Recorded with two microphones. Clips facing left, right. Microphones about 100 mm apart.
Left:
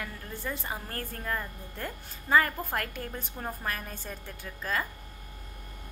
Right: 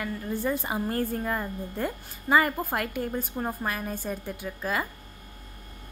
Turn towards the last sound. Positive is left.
turn(degrees=-10)  # may be behind; listen again after turning